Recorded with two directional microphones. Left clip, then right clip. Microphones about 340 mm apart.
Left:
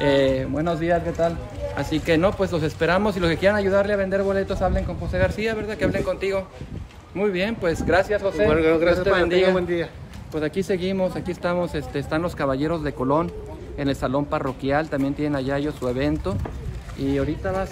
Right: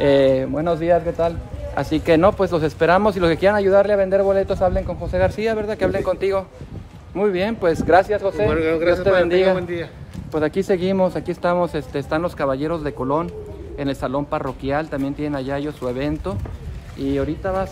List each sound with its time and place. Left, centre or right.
0.0 s speech: centre
8.5 s speech: centre
8.9 s speech: centre
9.6 s speech: centre
10.3 s speech: centre